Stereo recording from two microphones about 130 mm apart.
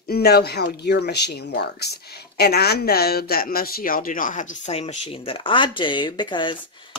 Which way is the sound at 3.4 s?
90° left.